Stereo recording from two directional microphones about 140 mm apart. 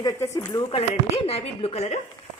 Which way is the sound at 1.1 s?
45° left (ahead or behind).